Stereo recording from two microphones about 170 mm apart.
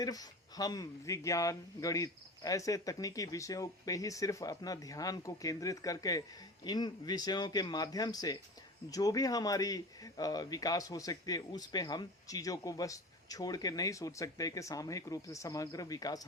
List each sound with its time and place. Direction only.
0.0 s a man's voice: 20° left (ahead or behind)